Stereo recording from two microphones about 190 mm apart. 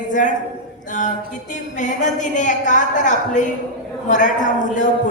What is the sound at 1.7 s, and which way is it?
A man's voice, 40° left (ahead or behind).